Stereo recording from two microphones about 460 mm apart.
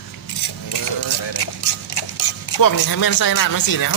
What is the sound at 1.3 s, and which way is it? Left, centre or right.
Mechanisms, left.